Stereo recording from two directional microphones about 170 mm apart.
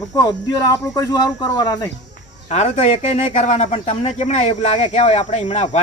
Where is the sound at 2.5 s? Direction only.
40° left (ahead or behind).